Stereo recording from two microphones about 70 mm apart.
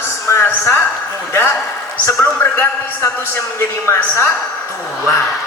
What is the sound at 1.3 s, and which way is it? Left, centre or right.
A man's voice, left.